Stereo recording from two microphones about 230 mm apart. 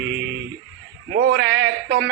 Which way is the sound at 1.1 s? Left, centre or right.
Right.